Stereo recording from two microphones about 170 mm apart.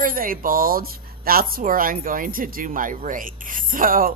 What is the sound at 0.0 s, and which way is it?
Speech, 55° right (ahead or behind).